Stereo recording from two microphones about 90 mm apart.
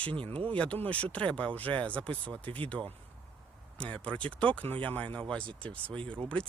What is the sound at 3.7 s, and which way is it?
Speech, 15° left (ahead or behind).